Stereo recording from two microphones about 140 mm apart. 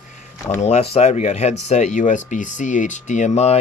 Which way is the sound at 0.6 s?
45° left (ahead or behind).